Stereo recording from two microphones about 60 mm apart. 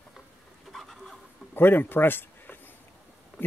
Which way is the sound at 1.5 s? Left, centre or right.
Left.